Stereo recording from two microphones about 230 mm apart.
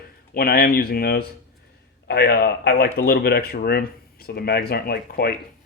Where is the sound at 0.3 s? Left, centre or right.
Left.